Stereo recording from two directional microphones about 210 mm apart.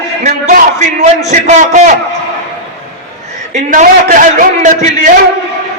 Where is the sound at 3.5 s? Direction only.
35° right (ahead or behind).